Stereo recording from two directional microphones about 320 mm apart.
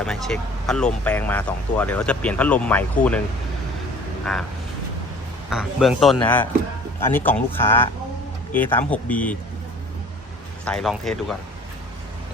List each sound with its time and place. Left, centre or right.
0.0 s speech: centre
5.5 s speech: centre
10.7 s speech: centre